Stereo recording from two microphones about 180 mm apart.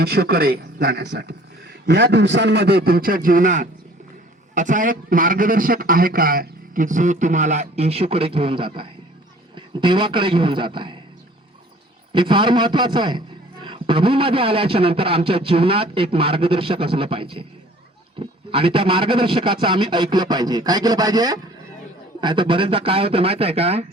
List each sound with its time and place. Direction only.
0.0 s a man's voice: 60° right (ahead or behind); by 10.9 s 25° right (ahead or behind)
12.1 s a man's voice: 25° right (ahead or behind)